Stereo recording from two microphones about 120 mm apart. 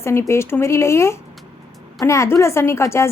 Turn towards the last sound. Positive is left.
turn(degrees=20)  # may be behind; listen again after turning